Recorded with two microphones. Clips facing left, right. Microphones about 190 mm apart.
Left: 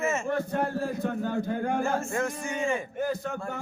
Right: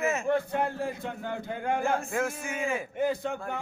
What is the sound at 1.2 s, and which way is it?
Speech, 15° right (ahead or behind).